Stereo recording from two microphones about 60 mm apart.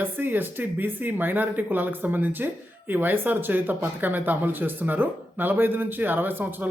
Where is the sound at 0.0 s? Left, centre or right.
Right.